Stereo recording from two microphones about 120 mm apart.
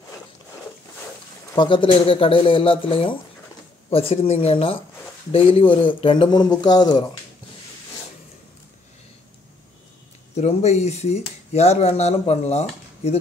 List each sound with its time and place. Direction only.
1.5 s speech: 40° left (ahead or behind)
10.3 s speech: 65° left (ahead or behind)